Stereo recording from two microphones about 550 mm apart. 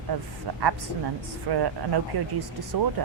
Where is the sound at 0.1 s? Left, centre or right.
Right.